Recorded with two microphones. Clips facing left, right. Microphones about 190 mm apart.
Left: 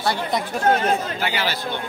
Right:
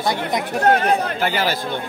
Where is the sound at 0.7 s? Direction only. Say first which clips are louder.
Right 2 dB; 55° right (ahead or behind).